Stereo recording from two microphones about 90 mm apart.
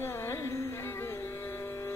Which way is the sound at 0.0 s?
30° left (ahead or behind).